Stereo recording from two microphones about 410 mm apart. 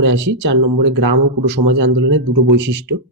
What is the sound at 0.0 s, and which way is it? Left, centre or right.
Speech, right.